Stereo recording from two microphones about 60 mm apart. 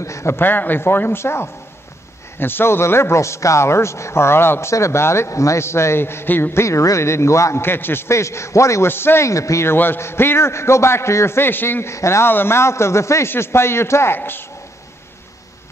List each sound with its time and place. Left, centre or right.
0.0 s a man's voice: left
0.4 s a man's voice: left
6.6 s a man's voice: left
7.6 s a man's voice: left
8.8 s speech: left
9.3 s a man's voice: left
9.7 s a man's voice: left
11.9 s a man's voice: left
12.3 s a man's voice: left